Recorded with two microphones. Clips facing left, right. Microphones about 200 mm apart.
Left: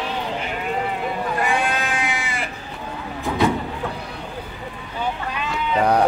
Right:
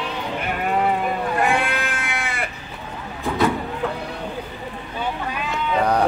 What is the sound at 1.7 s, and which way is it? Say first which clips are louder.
Sheep: left 2 dB; 60° right (ahead or behind).